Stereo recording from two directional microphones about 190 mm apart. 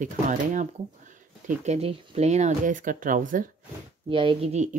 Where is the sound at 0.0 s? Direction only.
40° right (ahead or behind).